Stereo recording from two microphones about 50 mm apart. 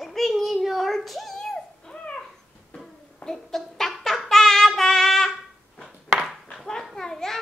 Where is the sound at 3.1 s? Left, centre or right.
Centre.